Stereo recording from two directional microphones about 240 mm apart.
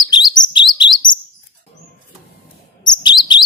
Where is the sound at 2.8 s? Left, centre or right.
Centre.